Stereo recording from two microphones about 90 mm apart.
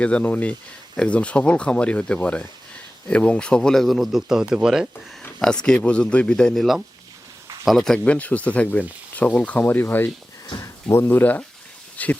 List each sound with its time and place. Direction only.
0.0 s speech: 15° left (ahead or behind); by 4.9 s 5° right (ahead or behind)
5.4 s speech: 10° left (ahead or behind)